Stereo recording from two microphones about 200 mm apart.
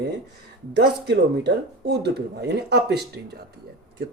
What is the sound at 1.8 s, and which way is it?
Speech, 55° right (ahead or behind).